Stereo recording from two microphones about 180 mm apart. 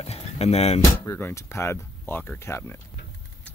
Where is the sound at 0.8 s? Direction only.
15° left (ahead or behind).